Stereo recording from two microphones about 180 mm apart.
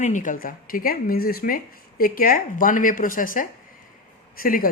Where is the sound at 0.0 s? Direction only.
45° left (ahead or behind).